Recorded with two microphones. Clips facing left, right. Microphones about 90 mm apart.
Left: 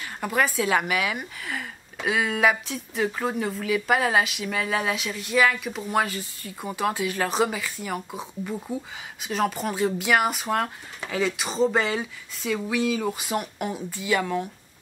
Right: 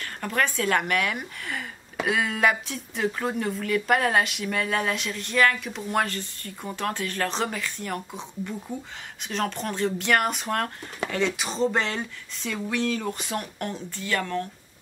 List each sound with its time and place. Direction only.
0.0 s a woman's voice: 10° left (ahead or behind)